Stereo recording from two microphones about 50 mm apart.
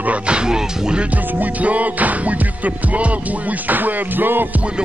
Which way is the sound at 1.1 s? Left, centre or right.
Right.